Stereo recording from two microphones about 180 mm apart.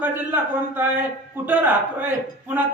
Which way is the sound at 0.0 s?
10° right (ahead or behind).